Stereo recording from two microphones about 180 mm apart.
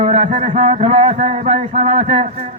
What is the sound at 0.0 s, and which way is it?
A man's voice, 35° right (ahead or behind).